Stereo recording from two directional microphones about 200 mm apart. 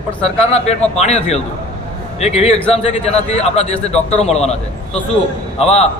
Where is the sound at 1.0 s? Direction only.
35° left (ahead or behind).